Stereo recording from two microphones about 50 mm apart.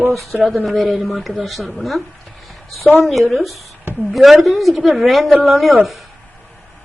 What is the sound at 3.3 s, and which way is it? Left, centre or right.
Speech, centre.